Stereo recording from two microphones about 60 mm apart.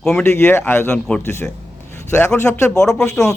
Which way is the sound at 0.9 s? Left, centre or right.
Centre.